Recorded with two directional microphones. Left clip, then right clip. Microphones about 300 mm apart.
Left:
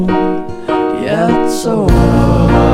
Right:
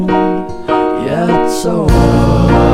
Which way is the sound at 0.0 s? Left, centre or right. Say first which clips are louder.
Right 1 dB; centre.